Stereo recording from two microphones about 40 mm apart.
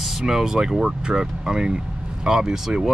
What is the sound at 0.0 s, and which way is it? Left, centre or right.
Speech, centre.